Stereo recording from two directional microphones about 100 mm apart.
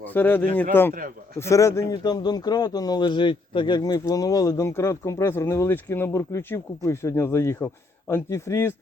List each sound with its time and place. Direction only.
0.1 s speech: 20° left (ahead or behind)
2.0 s speech: 45° left (ahead or behind)
3.8 s speech: 40° left (ahead or behind)